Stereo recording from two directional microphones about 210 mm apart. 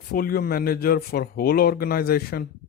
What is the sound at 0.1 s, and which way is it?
Speech, 45° left (ahead or behind).